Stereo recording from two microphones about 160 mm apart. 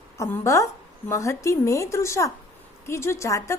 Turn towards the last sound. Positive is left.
turn(degrees=20)  # may be behind; listen again after turning